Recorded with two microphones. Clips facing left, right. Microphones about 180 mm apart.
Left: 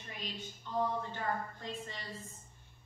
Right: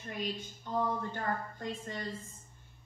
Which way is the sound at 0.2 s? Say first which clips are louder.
Right 7 dB; 45° right (ahead or behind).